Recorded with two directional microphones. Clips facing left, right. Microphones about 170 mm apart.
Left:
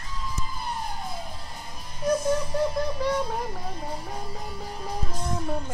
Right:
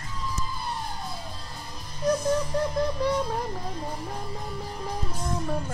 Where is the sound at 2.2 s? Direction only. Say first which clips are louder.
Left 1 dB; 5° left (ahead or behind).